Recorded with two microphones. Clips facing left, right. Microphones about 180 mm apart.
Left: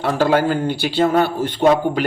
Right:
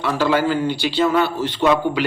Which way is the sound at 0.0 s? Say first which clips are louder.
Left 2 dB; 50° left (ahead or behind).